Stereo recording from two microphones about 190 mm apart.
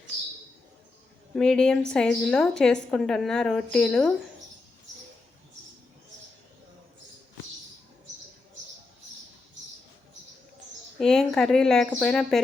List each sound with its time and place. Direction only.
1.4 s a woman's voice: 5° left (ahead or behind)
10.9 s a woman's voice: centre (ahead or behind)